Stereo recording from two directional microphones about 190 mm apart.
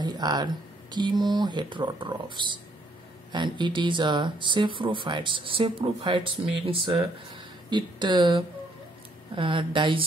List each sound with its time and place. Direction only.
0.0 s speech: 20° right (ahead or behind)